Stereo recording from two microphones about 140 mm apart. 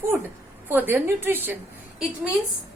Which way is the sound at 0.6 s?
15° right (ahead or behind).